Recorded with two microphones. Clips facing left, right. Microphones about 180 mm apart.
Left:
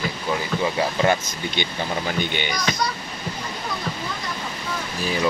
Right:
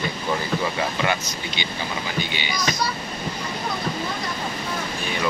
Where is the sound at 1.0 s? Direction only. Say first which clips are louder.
Left 4 dB; 50° left (ahead or behind).